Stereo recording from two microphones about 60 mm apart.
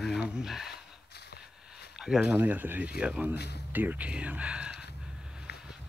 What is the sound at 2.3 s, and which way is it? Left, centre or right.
Speech, right.